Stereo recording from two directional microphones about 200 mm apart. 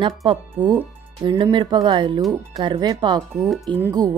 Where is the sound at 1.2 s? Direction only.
25° right (ahead or behind).